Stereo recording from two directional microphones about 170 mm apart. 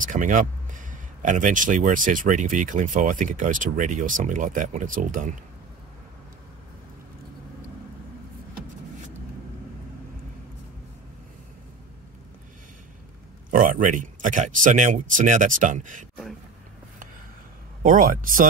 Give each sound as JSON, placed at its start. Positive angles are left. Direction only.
{"t": 0.0, "sound": "speech", "side_deg": -50}
{"t": 13.5, "sound": "speech", "side_deg": -50}
{"t": 17.8, "sound": "speech", "side_deg": -55}